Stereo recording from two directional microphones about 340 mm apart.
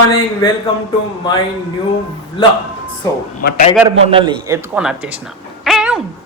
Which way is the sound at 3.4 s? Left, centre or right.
Left.